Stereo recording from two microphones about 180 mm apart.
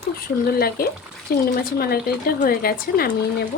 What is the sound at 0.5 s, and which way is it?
Speech, 55° left (ahead or behind).